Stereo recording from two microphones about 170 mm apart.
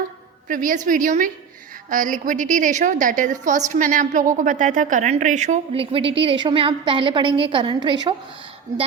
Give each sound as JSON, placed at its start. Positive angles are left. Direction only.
{"t": 0.4, "sound": "a woman's voice", "side_deg": -50}